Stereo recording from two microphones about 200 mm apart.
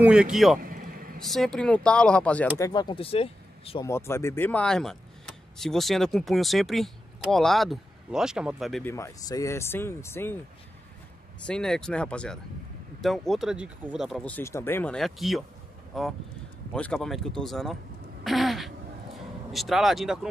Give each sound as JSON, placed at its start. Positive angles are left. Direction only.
{"t": 0.0, "sound": "speech", "side_deg": -5}
{"t": 0.6, "sound": "a sound", "side_deg": -45}
{"t": 1.2, "sound": "speech", "side_deg": 0}
{"t": 3.8, "sound": "speech", "side_deg": 10}
{"t": 8.8, "sound": "speech", "side_deg": 15}
{"t": 11.4, "sound": "speech", "side_deg": 5}
{"t": 18.2, "sound": "a sound", "side_deg": 0}
{"t": 19.1, "sound": "speech", "side_deg": 0}